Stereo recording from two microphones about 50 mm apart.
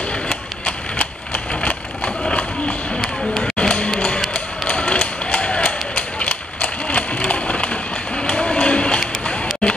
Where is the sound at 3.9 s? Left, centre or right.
Left.